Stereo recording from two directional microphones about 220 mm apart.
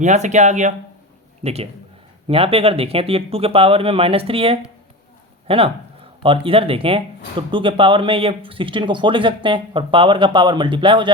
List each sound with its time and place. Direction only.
0.0 s speech: 30° right (ahead or behind)